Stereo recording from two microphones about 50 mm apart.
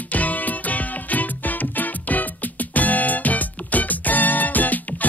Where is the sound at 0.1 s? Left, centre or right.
Left.